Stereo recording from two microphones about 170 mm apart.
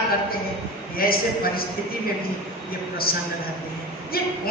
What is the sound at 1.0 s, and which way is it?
Speech, 60° left (ahead or behind).